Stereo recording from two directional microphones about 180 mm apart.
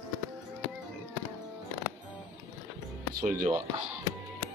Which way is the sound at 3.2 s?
50° right (ahead or behind).